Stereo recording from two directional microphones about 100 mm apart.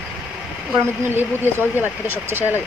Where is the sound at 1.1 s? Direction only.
20° right (ahead or behind).